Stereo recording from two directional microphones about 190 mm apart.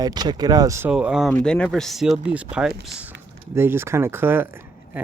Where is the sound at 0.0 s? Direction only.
20° right (ahead or behind).